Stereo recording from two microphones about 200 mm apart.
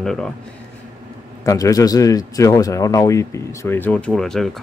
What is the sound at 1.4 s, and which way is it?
A man's voice, 15° left (ahead or behind).